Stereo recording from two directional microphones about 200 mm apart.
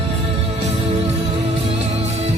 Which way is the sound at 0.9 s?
30° right (ahead or behind).